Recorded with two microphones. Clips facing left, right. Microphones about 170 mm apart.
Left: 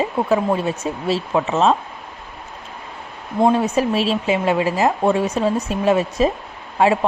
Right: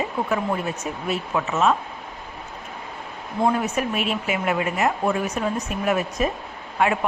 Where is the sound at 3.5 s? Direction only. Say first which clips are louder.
Left 5 dB; 30° left (ahead or behind).